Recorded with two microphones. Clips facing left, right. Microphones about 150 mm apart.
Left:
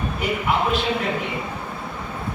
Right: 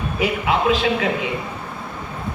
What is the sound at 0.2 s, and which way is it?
Speech, 90° right.